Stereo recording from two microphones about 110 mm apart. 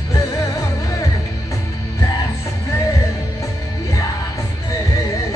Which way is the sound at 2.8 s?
30° left (ahead or behind).